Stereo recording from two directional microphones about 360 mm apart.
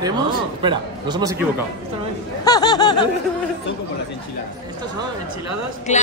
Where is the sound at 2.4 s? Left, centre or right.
Centre.